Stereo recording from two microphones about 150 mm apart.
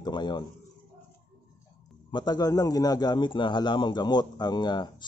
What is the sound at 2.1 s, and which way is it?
Speech, 30° left (ahead or behind).